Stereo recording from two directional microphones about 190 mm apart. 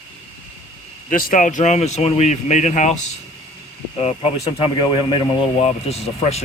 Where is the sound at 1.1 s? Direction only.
45° left (ahead or behind).